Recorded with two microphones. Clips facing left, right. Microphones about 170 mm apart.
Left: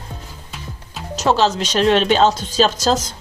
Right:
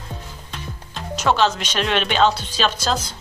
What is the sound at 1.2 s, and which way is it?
Speech, 35° left (ahead or behind).